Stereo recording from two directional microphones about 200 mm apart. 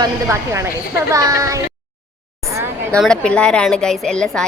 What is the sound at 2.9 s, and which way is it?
A woman's voice, 5° left (ahead or behind).